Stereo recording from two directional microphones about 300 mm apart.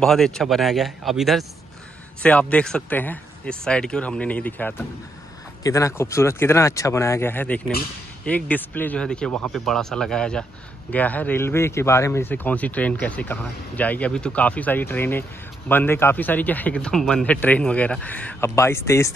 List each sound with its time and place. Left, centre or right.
0.0 s speech: centre